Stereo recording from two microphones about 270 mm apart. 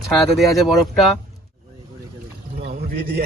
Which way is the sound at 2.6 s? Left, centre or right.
Right.